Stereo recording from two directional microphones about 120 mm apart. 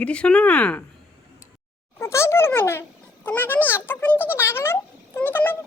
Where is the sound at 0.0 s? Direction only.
10° left (ahead or behind).